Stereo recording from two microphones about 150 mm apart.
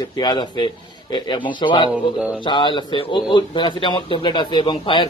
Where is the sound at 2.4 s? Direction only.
30° left (ahead or behind).